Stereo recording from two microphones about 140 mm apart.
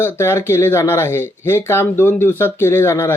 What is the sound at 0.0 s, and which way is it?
Speech, 15° left (ahead or behind).